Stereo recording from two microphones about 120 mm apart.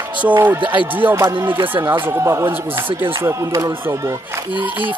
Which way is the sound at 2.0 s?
20° right (ahead or behind).